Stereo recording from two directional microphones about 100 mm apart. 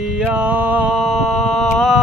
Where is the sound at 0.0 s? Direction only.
10° right (ahead or behind).